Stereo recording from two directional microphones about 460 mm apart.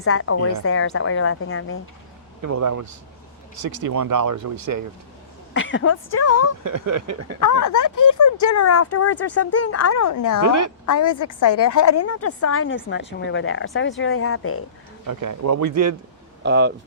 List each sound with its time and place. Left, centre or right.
0.0 s a woman's voice: left
2.4 s a man's voice: right
5.5 s speech: left
6.7 s a man's voice: right
7.3 s a woman's voice: left
15.0 s a man's voice: right
16.4 s speech: right